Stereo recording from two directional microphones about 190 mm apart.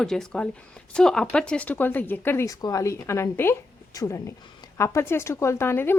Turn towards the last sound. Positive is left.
turn(degrees=10)  # may be behind; listen again after turning